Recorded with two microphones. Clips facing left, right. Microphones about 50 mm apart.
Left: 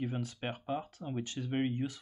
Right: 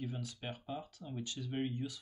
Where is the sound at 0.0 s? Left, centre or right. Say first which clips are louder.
Left 6 dB; left.